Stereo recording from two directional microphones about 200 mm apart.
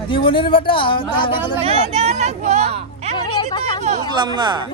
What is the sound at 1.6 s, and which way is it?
Speech, 30° right (ahead or behind).